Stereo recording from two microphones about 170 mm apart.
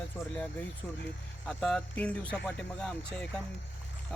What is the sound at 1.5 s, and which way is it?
Speech, 5° left (ahead or behind).